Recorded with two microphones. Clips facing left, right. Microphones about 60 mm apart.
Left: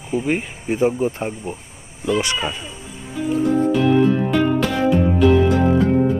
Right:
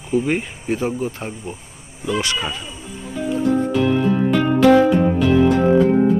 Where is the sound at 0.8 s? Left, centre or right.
Left.